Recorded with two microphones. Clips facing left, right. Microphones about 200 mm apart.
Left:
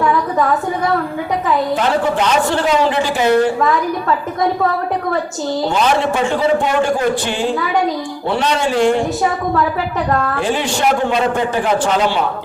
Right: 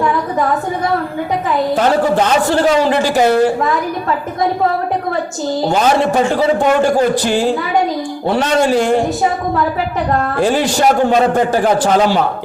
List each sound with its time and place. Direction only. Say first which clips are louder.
2.1 s a man's voice: right 3 dB; 40° right (ahead or behind)
5.8 s a man's voice: right 3 dB; 40° right (ahead or behind)
10.4 s a man's voice: right 8 dB; 40° right (ahead or behind)